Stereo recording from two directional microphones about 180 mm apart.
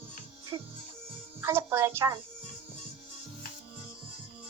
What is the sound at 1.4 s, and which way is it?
Speech, 15° right (ahead or behind).